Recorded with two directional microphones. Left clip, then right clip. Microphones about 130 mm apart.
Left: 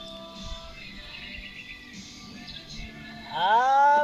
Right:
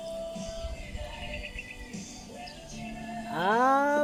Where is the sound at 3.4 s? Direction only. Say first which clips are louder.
Left 4 dB; 45° right (ahead or behind).